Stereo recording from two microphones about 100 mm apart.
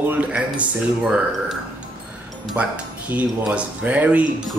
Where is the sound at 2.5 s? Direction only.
15° right (ahead or behind).